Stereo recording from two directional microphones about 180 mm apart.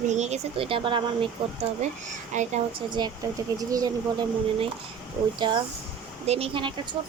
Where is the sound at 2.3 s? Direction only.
40° right (ahead or behind).